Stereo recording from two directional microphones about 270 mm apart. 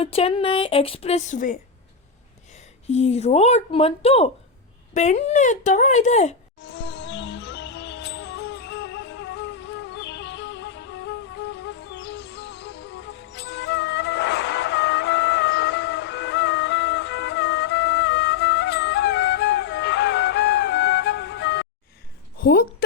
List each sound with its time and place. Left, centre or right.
0.0 s a woman's voice: left
2.9 s a woman's voice: left
6.7 s music: left
22.4 s a sound: left